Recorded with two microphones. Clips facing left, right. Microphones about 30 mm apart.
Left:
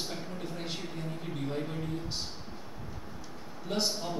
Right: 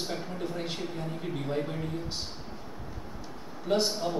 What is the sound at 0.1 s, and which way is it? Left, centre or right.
A man's voice, centre.